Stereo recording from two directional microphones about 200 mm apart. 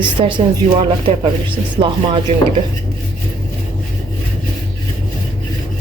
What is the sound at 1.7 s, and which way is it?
Speech, 25° right (ahead or behind).